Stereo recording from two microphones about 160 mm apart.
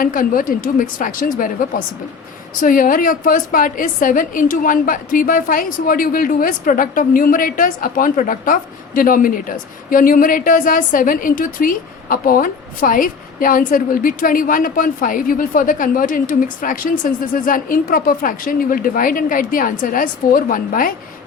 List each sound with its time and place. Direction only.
0.0 s a woman's voice: 60° left (ahead or behind)